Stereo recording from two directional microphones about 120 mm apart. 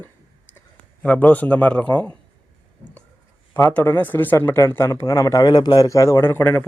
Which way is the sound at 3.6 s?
15° left (ahead or behind).